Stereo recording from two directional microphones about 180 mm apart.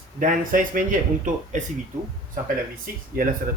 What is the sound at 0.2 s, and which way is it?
Speech, 50° right (ahead or behind).